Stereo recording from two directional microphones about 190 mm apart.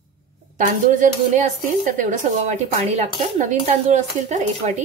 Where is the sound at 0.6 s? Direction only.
40° right (ahead or behind).